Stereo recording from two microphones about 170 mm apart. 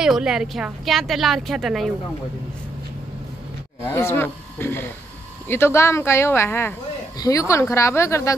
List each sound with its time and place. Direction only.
0.0 s a woman's voice: 5° right (ahead or behind)
3.9 s a woman's voice: 15° left (ahead or behind)